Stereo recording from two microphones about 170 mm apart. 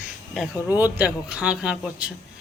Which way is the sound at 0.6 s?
10° right (ahead or behind).